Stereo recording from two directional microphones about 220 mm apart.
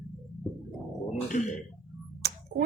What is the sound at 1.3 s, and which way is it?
Speech, 35° left (ahead or behind).